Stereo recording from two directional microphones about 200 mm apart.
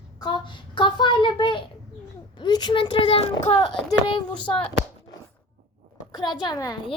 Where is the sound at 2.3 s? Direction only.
20° left (ahead or behind).